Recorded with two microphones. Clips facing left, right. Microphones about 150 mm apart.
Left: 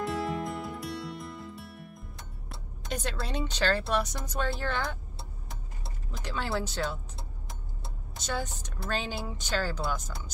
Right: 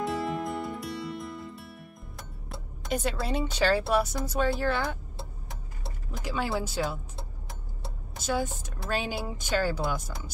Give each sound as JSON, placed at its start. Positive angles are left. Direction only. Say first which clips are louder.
{"t": 0.0, "sound": "music", "louder": "right 1 dB", "side_deg": 0}
{"t": 2.5, "sound": "speech", "louder": "right 5 dB", "side_deg": -5}
{"t": 6.2, "sound": "speech", "louder": "right 2 dB", "side_deg": -10}
{"t": 8.2, "sound": "speech", "louder": "right 5 dB", "side_deg": -5}